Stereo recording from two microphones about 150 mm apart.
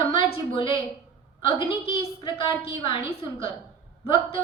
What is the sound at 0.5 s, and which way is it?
A woman's voice, 35° left (ahead or behind).